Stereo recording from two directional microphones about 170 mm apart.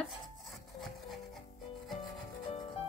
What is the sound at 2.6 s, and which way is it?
Music, 35° left (ahead or behind).